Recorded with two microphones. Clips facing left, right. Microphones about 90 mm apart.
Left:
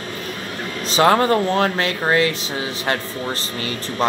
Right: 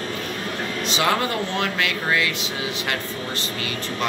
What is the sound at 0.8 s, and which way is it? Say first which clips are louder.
Speech: left 8 dB; 40° left (ahead or behind).